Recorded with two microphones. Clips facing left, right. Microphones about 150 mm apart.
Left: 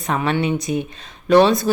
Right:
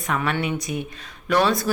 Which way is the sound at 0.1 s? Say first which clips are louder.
Left 4 dB; 30° left (ahead or behind).